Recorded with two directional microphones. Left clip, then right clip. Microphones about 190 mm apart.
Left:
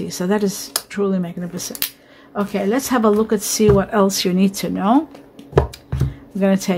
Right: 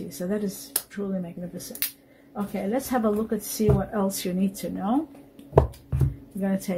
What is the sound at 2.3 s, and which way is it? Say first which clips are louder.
Speech: left 9 dB; 40° left (ahead or behind).